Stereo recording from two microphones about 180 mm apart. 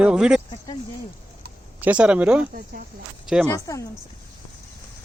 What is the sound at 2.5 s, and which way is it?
Speech, 55° right (ahead or behind).